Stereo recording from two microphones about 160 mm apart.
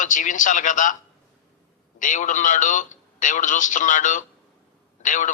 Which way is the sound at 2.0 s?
55° left (ahead or behind).